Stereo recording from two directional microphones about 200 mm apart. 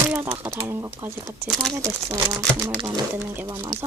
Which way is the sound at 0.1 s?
10° right (ahead or behind).